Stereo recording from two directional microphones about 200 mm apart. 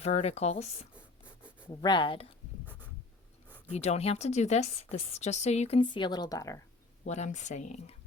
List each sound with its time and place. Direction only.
0.0 s speech: 30° left (ahead or behind)
1.8 s speech: 20° left (ahead or behind)
3.7 s speech: 35° left (ahead or behind); by 6.6 s 15° left (ahead or behind)
7.0 s speech: 35° left (ahead or behind)